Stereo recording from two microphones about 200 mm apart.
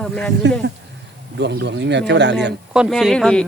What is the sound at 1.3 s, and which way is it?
Speech, 60° right (ahead or behind).